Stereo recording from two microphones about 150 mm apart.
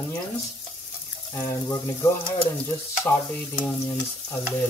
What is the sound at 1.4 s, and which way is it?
Speech, 20° left (ahead or behind).